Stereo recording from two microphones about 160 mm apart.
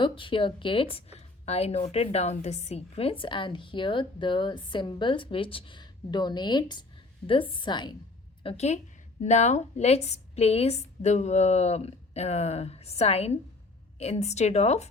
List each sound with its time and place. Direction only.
0.0 s a woman's voice: 30° left (ahead or behind)
8.4 s a woman's voice: 45° left (ahead or behind)